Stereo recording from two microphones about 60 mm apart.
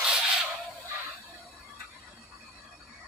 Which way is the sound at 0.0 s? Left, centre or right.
Centre.